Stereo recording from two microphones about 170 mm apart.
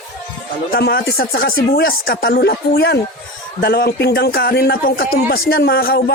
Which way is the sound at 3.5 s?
65° left (ahead or behind).